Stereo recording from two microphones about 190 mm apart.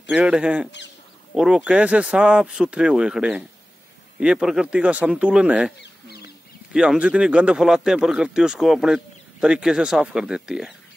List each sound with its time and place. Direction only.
0.1 s speech: 5° right (ahead or behind)
5.8 s duck: 55° left (ahead or behind)
6.7 s speech: 5° right (ahead or behind)